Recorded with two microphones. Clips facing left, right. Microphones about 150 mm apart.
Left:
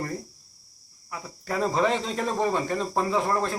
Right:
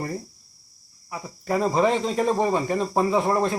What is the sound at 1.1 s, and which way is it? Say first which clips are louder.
Speech: right 5 dB; 10° right (ahead or behind).